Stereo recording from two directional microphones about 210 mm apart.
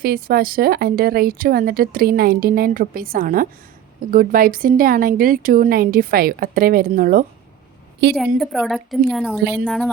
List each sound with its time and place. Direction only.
0.0 s speech: 45° right (ahead or behind)
8.0 s speech: 55° right (ahead or behind)
8.4 s a woman's voice: centre (ahead or behind)